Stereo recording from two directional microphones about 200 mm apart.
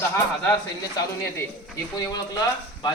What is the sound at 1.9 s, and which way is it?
Speech, 20° left (ahead or behind).